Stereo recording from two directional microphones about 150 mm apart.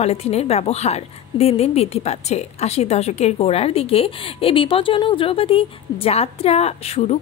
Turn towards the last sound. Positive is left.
turn(degrees=45)  # may be behind; listen again after turning